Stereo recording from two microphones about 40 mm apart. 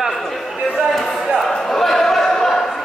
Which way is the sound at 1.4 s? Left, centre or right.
Centre.